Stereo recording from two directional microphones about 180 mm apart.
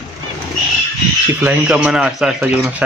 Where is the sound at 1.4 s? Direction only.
5° right (ahead or behind).